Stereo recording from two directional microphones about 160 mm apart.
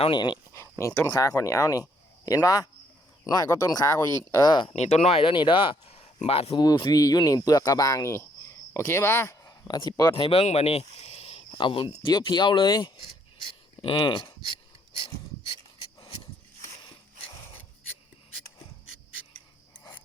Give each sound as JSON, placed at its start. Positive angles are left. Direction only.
{"t": 0.0, "sound": "speech", "side_deg": 30}
{"t": 0.5, "sound": "speech", "side_deg": 20}
{"t": 4.7, "sound": "speech", "side_deg": 45}
{"t": 6.7, "sound": "speech", "side_deg": 25}
{"t": 10.2, "sound": "speech", "side_deg": 35}
{"t": 14.9, "sound": "a sound", "side_deg": 35}